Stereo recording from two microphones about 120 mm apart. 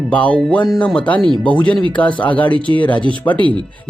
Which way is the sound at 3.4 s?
40° right (ahead or behind).